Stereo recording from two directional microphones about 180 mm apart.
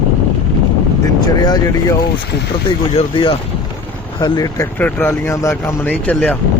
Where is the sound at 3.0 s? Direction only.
30° left (ahead or behind).